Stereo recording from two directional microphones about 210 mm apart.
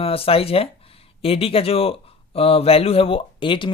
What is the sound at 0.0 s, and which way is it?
Speech, 25° left (ahead or behind).